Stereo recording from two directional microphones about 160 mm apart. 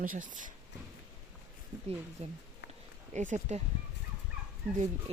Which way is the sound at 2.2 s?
40° right (ahead or behind).